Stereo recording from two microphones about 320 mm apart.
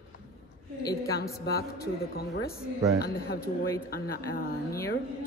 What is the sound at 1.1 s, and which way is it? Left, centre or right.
Speech, left.